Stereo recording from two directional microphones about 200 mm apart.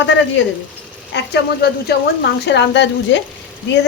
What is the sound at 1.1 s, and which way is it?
A woman's voice, 55° left (ahead or behind).